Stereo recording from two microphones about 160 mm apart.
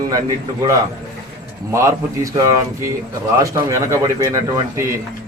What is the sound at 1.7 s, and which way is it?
A man's voice, 20° right (ahead or behind).